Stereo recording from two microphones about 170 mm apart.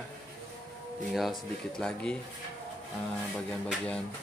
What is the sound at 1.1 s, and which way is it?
Speech, centre (ahead or behind).